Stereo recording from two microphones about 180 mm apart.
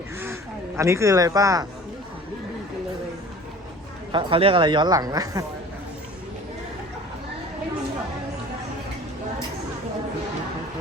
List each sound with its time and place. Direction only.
0.8 s speech: 15° right (ahead or behind)
4.1 s speech: 30° right (ahead or behind)